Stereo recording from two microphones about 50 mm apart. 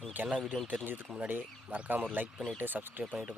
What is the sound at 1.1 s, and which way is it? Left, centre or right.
Speech, right.